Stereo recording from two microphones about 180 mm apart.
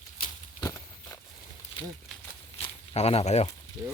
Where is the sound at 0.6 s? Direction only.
15° left (ahead or behind).